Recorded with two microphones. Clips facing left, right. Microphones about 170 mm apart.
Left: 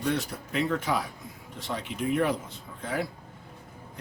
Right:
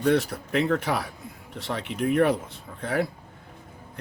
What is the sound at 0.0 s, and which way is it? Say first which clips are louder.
Speech: right 7 dB; 65° right (ahead or behind).